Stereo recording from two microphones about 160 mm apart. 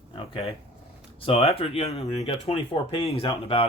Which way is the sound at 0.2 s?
35° left (ahead or behind).